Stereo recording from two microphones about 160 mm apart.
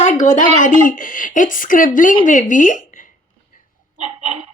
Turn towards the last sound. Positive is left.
turn(degrees=-45)  # may be behind; listen again after turning